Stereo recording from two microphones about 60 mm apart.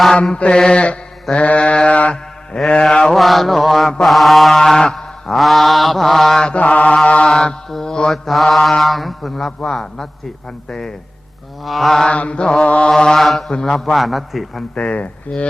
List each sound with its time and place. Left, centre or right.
0.3 s mantra: centre
3.2 s a man's voice: centre
4.0 s mantra: centre
8.3 s a man's voice: centre
9.6 s mantra: centre
11.6 s a man's voice: centre
12.0 s mantra: centre
13.1 s a man's voice: centre
14.8 s speech: left